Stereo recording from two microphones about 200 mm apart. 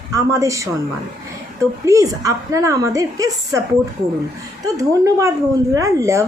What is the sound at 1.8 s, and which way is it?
Speech, 15° right (ahead or behind).